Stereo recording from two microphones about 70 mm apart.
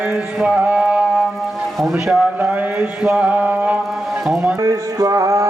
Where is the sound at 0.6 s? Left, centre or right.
Centre.